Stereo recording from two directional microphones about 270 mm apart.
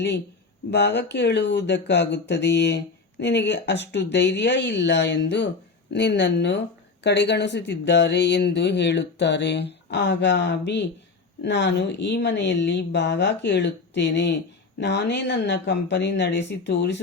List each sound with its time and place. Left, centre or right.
0.7 s speech: left